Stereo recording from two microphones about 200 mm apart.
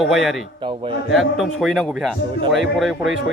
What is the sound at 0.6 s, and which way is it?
Speech, 25° right (ahead or behind).